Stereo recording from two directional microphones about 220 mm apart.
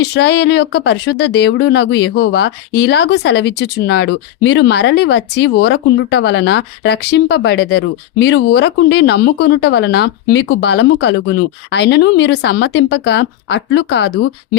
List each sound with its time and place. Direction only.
0.0 s speech: 50° left (ahead or behind)